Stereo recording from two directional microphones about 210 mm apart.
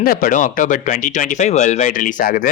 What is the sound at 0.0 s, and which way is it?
Speech, 40° left (ahead or behind).